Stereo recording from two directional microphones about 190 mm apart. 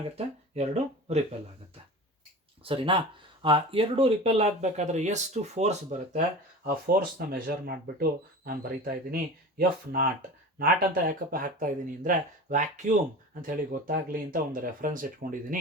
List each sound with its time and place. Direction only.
0.5 s speech: 35° right (ahead or behind)
2.6 s speech: 25° right (ahead or behind)
6.8 s speech: 55° right (ahead or behind)